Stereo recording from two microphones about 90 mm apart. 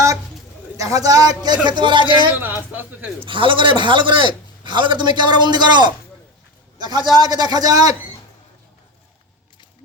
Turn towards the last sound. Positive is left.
turn(degrees=-45)  # may be behind; listen again after turning